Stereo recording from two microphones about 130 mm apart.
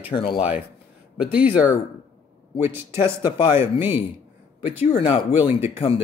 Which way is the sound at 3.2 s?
35° left (ahead or behind).